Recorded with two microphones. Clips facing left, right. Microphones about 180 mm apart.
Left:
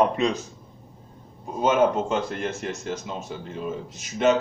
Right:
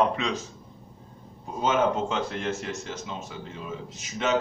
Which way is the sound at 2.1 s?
50° left (ahead or behind).